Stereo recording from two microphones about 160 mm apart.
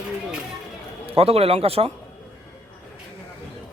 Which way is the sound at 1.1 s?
40° right (ahead or behind).